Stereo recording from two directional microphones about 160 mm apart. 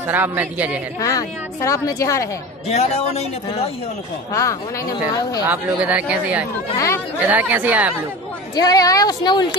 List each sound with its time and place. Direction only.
0.0 s speech: 10° right (ahead or behind)
0.9 s a woman's voice: 20° left (ahead or behind)
2.7 s a man's voice: 40° left (ahead or behind)
4.3 s a woman's voice: 20° left (ahead or behind)
5.5 s speech: 10° right (ahead or behind)
8.5 s a woman's voice: 25° left (ahead or behind)